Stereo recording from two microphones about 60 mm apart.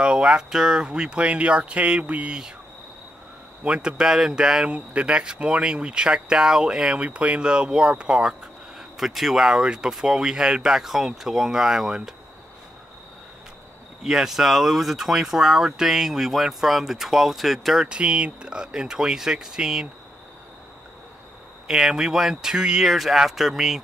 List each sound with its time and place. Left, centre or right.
0.0 s speech: centre
3.6 s speech: centre
14.0 s speech: centre
17.8 s speech: centre
21.6 s speech: centre